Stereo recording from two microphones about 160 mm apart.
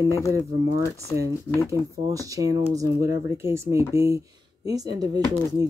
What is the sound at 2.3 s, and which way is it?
Speech, 20° right (ahead or behind).